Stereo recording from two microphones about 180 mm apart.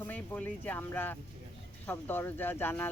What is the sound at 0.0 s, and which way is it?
Speech, 10° left (ahead or behind).